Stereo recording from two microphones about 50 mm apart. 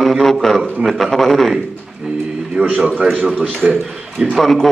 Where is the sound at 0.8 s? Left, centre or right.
Centre.